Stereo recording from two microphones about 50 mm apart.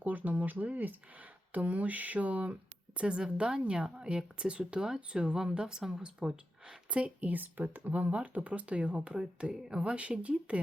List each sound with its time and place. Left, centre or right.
0.0 s speech: right; by 6.4 s centre
6.9 s speech: right